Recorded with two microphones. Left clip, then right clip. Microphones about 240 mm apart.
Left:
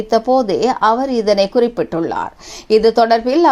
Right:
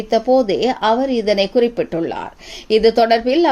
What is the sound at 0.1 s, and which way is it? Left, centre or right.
A woman's voice, centre.